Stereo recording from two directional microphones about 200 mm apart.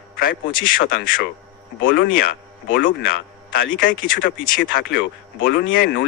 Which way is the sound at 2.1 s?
45° left (ahead or behind).